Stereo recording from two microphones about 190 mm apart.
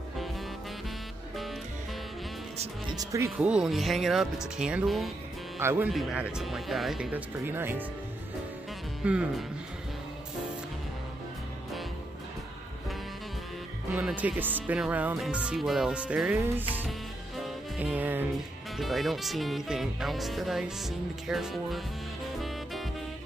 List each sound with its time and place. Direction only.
2.5 s speech: 35° right (ahead or behind)
3.0 s speech: 15° right (ahead or behind)
3.3 s speech: 5° right (ahead or behind)
5.6 s speech: 15° right (ahead or behind)
9.0 s speech: 5° right (ahead or behind)
13.9 s speech: 10° right (ahead or behind)
17.4 s music: 5° right (ahead or behind)
18.8 s speech: centre (ahead or behind)